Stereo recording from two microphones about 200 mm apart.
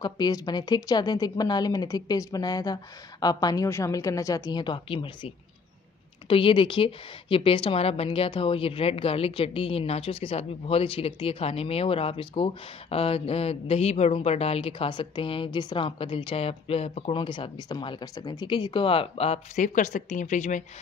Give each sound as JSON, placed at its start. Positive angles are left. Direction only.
{"t": 0.0, "sound": "a woman's voice", "side_deg": 20}